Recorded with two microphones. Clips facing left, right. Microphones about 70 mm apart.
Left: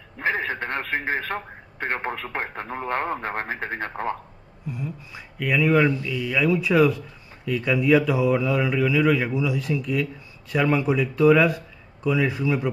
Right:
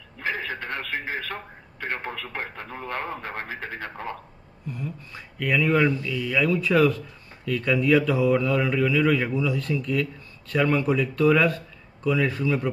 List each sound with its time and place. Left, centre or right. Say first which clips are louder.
0.2 s a man's voice: left 4 dB; left
4.6 s speech: left 1 dB; centre